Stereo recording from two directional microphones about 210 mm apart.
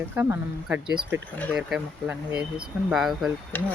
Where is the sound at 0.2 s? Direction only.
10° right (ahead or behind).